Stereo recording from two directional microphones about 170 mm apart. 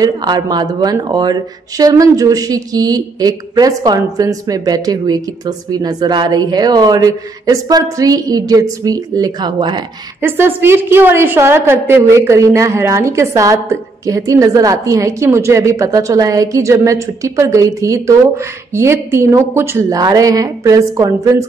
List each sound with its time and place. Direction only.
0.0 s speech: 25° right (ahead or behind)
10.2 s a woman's voice: 15° right (ahead or behind)